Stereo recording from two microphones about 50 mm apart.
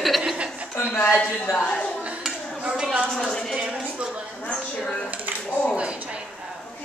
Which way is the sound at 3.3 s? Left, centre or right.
Centre.